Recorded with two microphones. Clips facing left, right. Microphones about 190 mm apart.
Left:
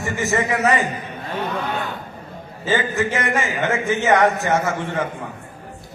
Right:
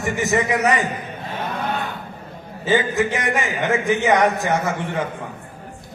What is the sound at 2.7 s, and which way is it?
A man's voice, 15° right (ahead or behind).